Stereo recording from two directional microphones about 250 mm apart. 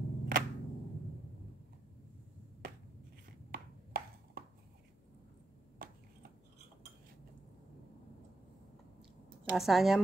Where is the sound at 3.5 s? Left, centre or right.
Right.